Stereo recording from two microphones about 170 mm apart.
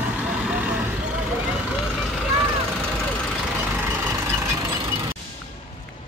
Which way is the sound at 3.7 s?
10° right (ahead or behind).